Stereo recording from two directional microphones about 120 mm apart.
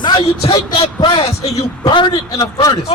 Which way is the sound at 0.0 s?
40° left (ahead or behind).